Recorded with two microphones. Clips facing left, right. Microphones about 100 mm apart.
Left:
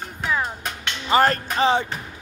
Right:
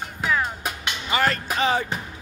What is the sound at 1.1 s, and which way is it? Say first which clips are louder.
Speech: left 5 dB; 40° left (ahead or behind).